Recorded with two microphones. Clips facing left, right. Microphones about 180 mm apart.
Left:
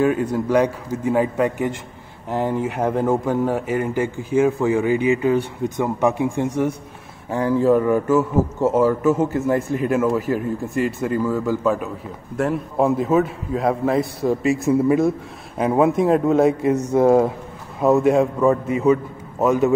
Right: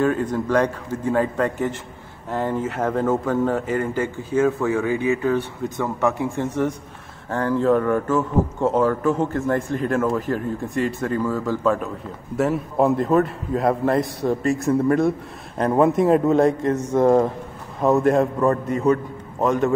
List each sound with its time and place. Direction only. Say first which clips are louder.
0.0 s a man's voice: left 2 dB; 10° left (ahead or behind)